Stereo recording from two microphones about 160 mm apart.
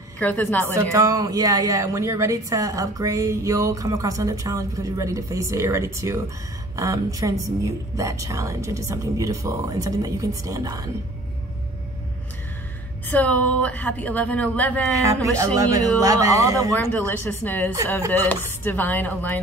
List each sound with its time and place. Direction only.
0.2 s speech: 10° left (ahead or behind)
0.9 s a woman's voice: 20° right (ahead or behind)
13.1 s speech: 10° left (ahead or behind)
15.3 s a woman's voice: 20° right (ahead or behind)
16.9 s speech: 10° left (ahead or behind)